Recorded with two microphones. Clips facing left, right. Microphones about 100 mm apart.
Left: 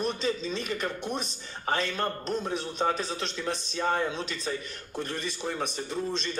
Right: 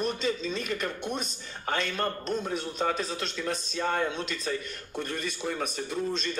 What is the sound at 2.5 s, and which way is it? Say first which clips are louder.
A man's voice: left 3 dB; 30° left (ahead or behind).